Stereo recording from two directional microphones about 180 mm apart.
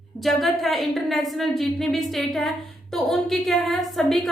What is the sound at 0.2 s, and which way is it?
A woman's voice, centre (ahead or behind).